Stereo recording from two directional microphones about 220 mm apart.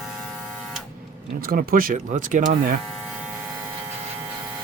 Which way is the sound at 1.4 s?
40° right (ahead or behind).